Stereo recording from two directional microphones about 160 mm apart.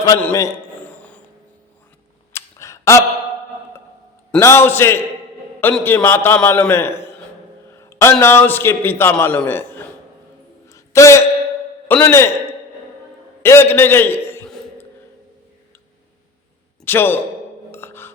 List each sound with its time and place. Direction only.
0.2 s a man's voice: 15° left (ahead or behind)
0.9 s a sound: 10° left (ahead or behind)
2.3 s camera: 20° left (ahead or behind)
4.4 s a man's voice: 15° left (ahead or behind)
7.8 s a sound: 15° left (ahead or behind)
8.2 s a man's voice: 15° left (ahead or behind)
10.7 s a sound: 20° left (ahead or behind)
11.9 s a man's voice: 10° left (ahead or behind)
13.4 s a man's voice: 15° left (ahead or behind)
16.8 s a man's voice: 15° left (ahead or behind)
17.7 s music: 15° left (ahead or behind)